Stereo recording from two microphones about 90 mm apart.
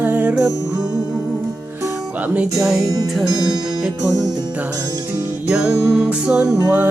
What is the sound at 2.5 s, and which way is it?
Music, centre (ahead or behind).